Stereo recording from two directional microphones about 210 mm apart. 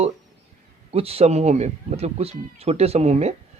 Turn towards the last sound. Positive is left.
turn(degrees=-30)  # may be behind; listen again after turning